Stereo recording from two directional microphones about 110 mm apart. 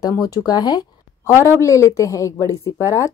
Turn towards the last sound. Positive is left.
turn(degrees=30)  # may be behind; listen again after turning